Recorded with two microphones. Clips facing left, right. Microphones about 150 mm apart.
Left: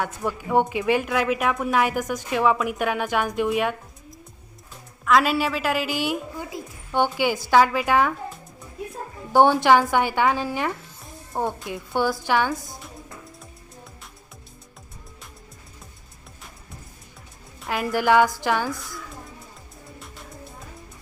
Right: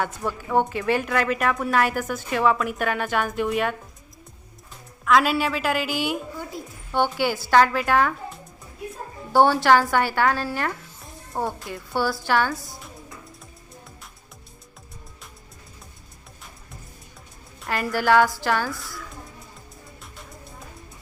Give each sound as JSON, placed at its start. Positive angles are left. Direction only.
{"t": 0.0, "sound": "a woman's voice", "side_deg": 10}
{"t": 5.0, "sound": "a woman's voice", "side_deg": 0}
{"t": 6.9, "sound": "speech", "side_deg": 15}
{"t": 9.3, "sound": "speech", "side_deg": 15}
{"t": 11.4, "sound": "a woman's voice", "side_deg": 0}
{"t": 11.9, "sound": "speech", "side_deg": 15}
{"t": 17.7, "sound": "speech", "side_deg": 10}